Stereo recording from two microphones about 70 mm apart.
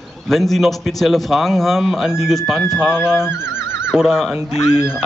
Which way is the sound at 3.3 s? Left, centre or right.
Left.